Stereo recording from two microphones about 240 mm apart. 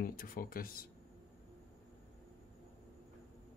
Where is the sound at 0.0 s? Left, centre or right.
Left.